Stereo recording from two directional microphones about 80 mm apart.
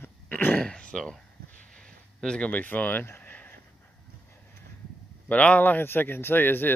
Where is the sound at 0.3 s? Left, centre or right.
Centre.